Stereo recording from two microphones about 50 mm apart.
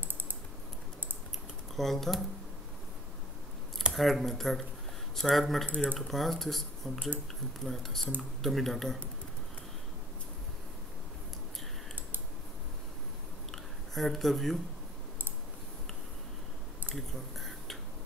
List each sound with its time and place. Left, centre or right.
1.8 s speech: centre
3.9 s speech: centre
5.7 s speech: right
5.9 s speech: centre
13.5 s a sound: centre
16.9 s a sound: centre